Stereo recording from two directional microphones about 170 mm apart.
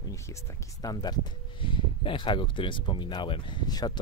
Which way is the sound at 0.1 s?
15° left (ahead or behind).